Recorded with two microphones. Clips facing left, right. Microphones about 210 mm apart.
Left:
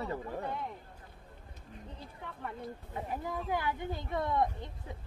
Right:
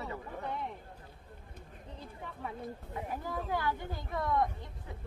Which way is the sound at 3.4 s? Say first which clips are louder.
Left 1 dB; 15° left (ahead or behind).